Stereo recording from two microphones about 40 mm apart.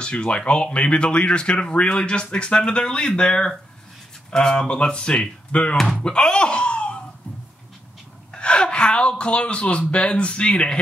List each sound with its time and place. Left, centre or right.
0.0 s speech: left
8.3 s gasp: left
9.2 s speech: left